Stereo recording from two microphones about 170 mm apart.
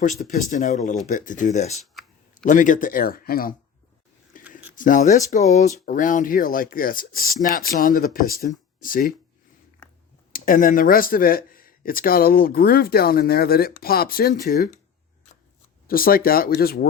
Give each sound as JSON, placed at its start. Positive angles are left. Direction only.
{"t": 0.0, "sound": "speech", "side_deg": 50}
{"t": 4.3, "sound": "a sound", "side_deg": 50}
{"t": 4.8, "sound": "speech", "side_deg": 50}
{"t": 10.3, "sound": "speech", "side_deg": 55}
{"t": 15.9, "sound": "speech", "side_deg": 60}